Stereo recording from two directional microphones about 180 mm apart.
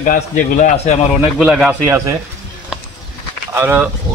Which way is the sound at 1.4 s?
5° right (ahead or behind).